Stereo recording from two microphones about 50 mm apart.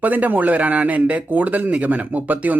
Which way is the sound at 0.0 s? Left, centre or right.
Right.